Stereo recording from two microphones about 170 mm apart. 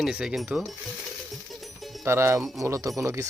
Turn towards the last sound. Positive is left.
turn(degrees=-15)  # may be behind; listen again after turning